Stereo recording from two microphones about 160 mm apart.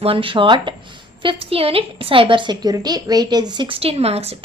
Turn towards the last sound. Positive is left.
turn(degrees=-40)  # may be behind; listen again after turning